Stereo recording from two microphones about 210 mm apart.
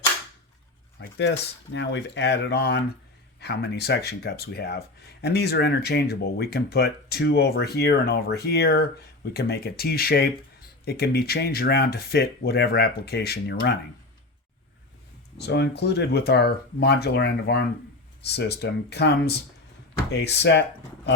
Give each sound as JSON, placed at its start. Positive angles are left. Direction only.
{"t": 1.0, "sound": "speech", "side_deg": 55}
{"t": 15.4, "sound": "speech", "side_deg": 50}